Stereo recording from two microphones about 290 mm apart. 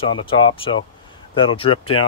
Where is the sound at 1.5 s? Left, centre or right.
Centre.